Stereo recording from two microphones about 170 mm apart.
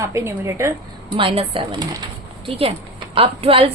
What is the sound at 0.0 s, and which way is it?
Speech, 15° right (ahead or behind).